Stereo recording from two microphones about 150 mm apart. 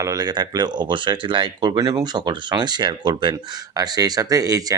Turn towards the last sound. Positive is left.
turn(degrees=-25)  # may be behind; listen again after turning